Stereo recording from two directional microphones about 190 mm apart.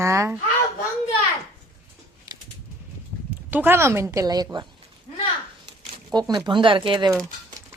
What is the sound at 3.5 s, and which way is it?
A woman's voice, 10° right (ahead or behind).